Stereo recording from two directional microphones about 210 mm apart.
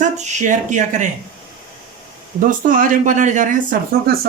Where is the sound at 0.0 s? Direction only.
35° right (ahead or behind).